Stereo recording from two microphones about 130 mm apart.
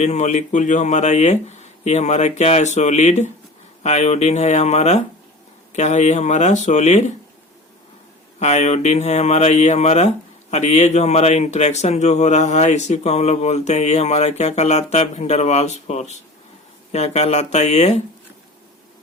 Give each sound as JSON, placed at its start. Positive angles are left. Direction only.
{"t": 0.0, "sound": "speech", "side_deg": 60}
{"t": 8.4, "sound": "speech", "side_deg": 60}